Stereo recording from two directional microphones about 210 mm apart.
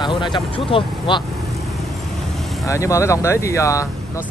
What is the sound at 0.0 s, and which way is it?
Speech, 20° left (ahead or behind).